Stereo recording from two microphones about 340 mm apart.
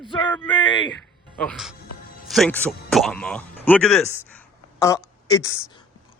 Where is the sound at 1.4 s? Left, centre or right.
Centre.